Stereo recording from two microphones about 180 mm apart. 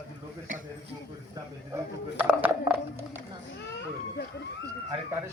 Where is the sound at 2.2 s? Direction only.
10° right (ahead or behind).